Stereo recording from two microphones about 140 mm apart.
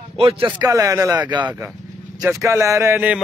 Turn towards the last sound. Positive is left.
turn(degrees=-15)  # may be behind; listen again after turning